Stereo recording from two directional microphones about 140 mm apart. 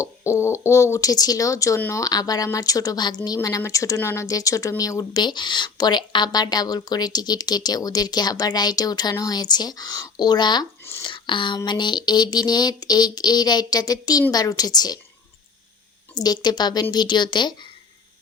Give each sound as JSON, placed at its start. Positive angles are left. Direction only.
{"t": 0.0, "sound": "speech", "side_deg": 20}
{"t": 16.1, "sound": "speech", "side_deg": 30}